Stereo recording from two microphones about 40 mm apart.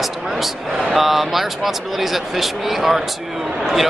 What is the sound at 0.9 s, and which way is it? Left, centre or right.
Speech, centre.